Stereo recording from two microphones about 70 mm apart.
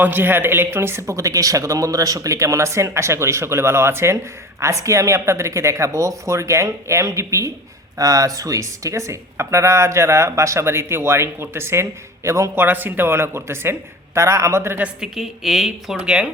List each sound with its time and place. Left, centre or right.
0.0 s speech: right
1.1 s speech: right
7.9 s speech: right
12.5 s speech: right
15.0 s speech: centre